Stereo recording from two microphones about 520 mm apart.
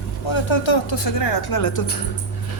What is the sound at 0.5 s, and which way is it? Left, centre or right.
A woman's voice, left.